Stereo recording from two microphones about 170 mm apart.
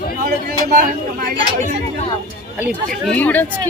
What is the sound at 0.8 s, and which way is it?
Speech, 50° right (ahead or behind).